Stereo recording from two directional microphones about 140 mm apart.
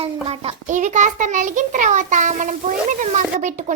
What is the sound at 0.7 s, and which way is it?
A child's voice, 60° right (ahead or behind).